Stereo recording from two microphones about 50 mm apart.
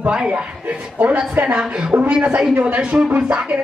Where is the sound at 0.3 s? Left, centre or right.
Right.